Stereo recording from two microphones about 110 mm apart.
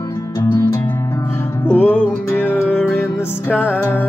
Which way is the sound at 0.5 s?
20° left (ahead or behind).